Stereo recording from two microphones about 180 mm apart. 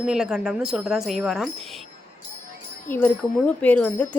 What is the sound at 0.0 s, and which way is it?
A woman's voice, 5° right (ahead or behind).